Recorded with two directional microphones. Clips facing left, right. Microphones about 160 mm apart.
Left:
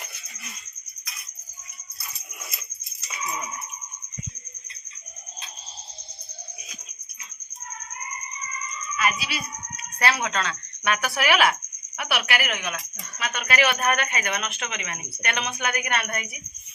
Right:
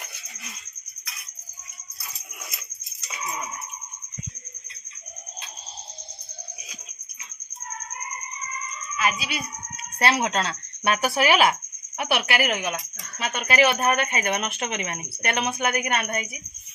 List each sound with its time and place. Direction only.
9.0 s fowl: 20° right (ahead or behind)
10.0 s speech: 30° right (ahead or behind)